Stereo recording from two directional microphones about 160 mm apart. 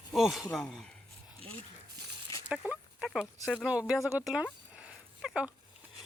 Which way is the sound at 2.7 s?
5° right (ahead or behind).